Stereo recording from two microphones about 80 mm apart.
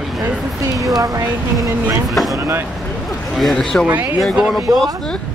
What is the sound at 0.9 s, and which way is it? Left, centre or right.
Speech, right.